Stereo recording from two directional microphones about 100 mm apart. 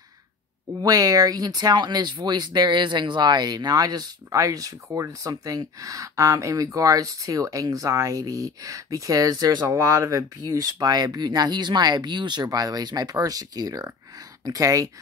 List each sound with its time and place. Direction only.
0.8 s speech: 35° right (ahead or behind)